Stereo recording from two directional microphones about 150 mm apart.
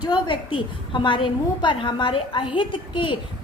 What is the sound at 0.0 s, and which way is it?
A woman's voice, 30° left (ahead or behind).